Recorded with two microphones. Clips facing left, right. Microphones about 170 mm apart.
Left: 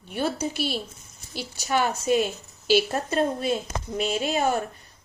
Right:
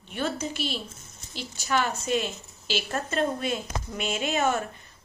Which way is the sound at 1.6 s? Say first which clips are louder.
Left 2 dB; 45° left (ahead or behind).